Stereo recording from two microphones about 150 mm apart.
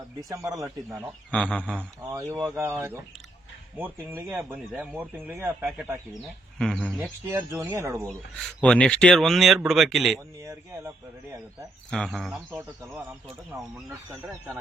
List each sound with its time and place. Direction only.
0.2 s speech: 25° right (ahead or behind)
1.3 s a man's voice: 10° left (ahead or behind)
2.0 s speech: 20° right (ahead or behind)
6.1 s speech: centre (ahead or behind)
7.0 s speech: 15° right (ahead or behind)
8.4 s speech: 5° left (ahead or behind)
10.4 s speech: 20° right (ahead or behind)
11.9 s speech: 5° left (ahead or behind)
12.5 s speech: 15° right (ahead or behind)